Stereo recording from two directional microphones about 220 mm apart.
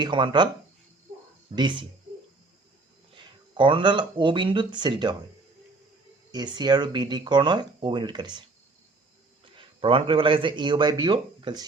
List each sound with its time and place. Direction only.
0.0 s speech: 20° right (ahead or behind)
1.5 s speech: 20° right (ahead or behind)
3.6 s speech: 20° right (ahead or behind)
6.3 s a man's voice: 20° right (ahead or behind)